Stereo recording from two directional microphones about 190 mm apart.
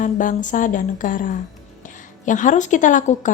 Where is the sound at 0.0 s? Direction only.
45° left (ahead or behind).